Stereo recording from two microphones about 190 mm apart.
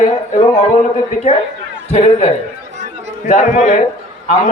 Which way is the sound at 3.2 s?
40° left (ahead or behind).